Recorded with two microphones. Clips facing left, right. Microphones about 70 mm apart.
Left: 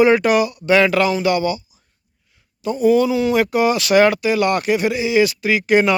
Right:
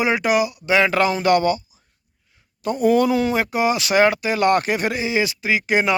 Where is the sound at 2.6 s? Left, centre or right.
Right.